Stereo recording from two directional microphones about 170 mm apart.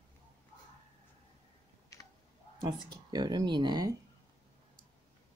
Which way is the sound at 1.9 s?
20° left (ahead or behind).